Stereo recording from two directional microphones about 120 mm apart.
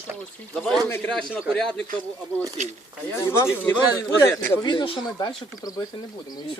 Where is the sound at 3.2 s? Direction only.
20° left (ahead or behind).